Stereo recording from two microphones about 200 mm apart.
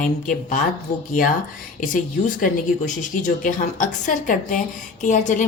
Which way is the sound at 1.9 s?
40° left (ahead or behind).